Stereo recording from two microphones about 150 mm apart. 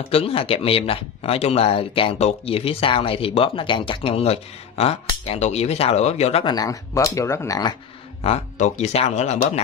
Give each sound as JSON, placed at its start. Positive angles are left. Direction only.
{"t": 0.1, "sound": "speech", "side_deg": 40}
{"t": 6.4, "sound": "speech", "side_deg": 25}
{"t": 8.2, "sound": "speech", "side_deg": 50}